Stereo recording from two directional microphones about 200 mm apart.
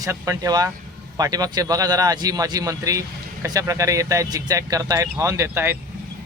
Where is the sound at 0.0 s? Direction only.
15° right (ahead or behind).